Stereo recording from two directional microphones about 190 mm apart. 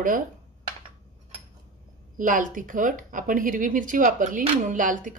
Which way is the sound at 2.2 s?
45° right (ahead or behind).